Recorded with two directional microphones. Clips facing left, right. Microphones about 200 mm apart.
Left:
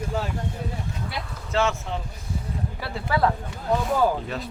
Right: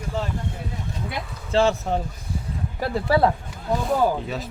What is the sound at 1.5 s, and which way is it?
Speech, 35° right (ahead or behind).